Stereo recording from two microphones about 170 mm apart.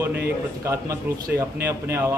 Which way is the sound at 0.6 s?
15° right (ahead or behind).